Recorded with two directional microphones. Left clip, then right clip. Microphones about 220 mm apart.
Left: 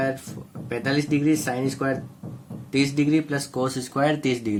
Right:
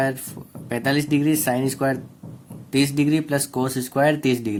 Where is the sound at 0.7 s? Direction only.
45° right (ahead or behind).